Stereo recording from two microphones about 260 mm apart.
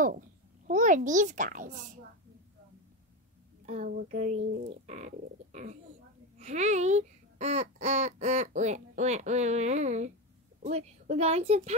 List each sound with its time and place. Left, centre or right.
0.7 s speech: right
3.6 s speech: right